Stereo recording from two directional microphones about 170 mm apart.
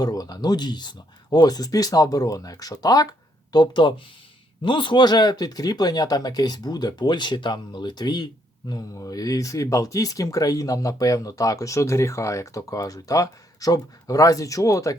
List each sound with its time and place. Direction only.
0.0 s speech: 20° left (ahead or behind)